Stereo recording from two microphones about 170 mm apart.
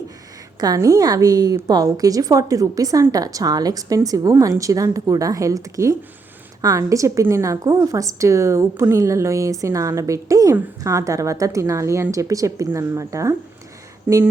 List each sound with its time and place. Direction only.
0.6 s a woman's voice: 20° right (ahead or behind)